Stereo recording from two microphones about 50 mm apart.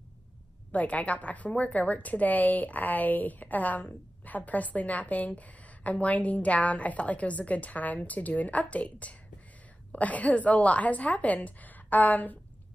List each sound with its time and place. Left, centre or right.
0.7 s a woman's voice: left